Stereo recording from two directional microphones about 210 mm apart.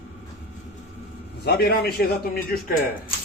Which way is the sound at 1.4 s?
50° left (ahead or behind).